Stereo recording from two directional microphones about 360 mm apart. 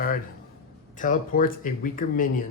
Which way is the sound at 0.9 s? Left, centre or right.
Left.